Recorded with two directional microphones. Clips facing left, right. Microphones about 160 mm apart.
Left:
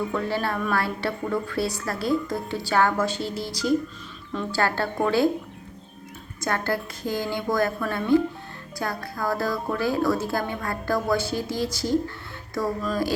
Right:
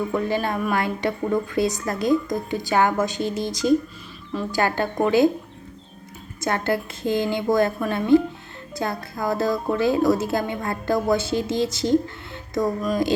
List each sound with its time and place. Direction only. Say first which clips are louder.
0.1 s a woman's voice: right 3 dB; 15° right (ahead or behind)
6.4 s a woman's voice: right 3 dB; 20° right (ahead or behind)